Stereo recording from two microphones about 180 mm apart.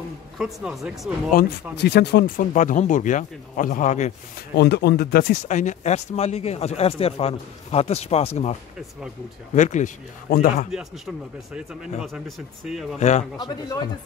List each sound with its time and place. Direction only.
0.4 s speech: 5° right (ahead or behind)
1.3 s speech: 65° left (ahead or behind); by 4.1 s 40° left (ahead or behind)
4.6 s speech: 65° left (ahead or behind)
5.3 s speech: 40° left (ahead or behind)
10.7 s speech: 5° right (ahead or behind)
13.4 s speech: 20° left (ahead or behind)